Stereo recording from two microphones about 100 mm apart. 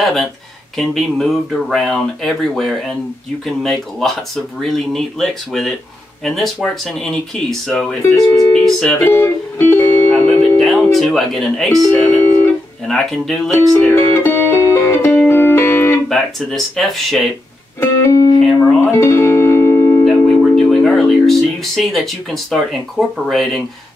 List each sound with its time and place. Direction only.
0.0 s speech: centre (ahead or behind)
8.0 s speech: 30° left (ahead or behind)
8.6 s speech: 5° left (ahead or behind)
9.0 s speech: 20° left (ahead or behind)
10.6 s speech: centre (ahead or behind)
12.8 s speech: 5° left (ahead or behind)
13.8 s music: 25° left (ahead or behind)
16.1 s speech: centre (ahead or behind)
17.7 s music: 30° left (ahead or behind)
20.1 s speech: 5° left (ahead or behind)